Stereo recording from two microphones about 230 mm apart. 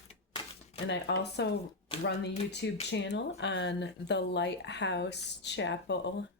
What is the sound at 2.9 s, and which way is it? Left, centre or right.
Speech, left.